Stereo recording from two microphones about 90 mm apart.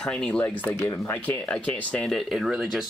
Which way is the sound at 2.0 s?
Centre (ahead or behind).